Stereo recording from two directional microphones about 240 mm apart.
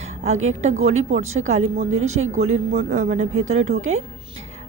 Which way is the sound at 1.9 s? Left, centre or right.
Right.